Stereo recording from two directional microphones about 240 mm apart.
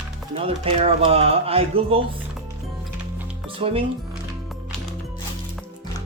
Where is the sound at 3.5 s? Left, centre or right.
Right.